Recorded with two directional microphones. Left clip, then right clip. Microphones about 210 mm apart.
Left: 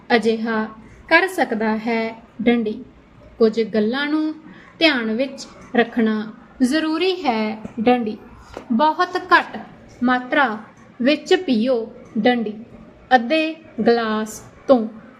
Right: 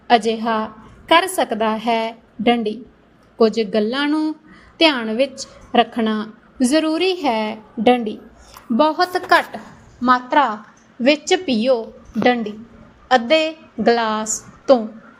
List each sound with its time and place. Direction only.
0.1 s a woman's voice: 35° right (ahead or behind)
10.0 s a woman's voice: 10° right (ahead or behind)